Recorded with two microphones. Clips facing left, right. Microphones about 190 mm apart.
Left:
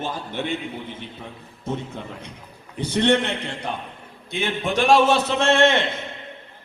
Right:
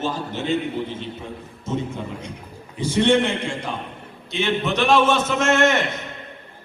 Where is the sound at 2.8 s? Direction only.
65° left (ahead or behind).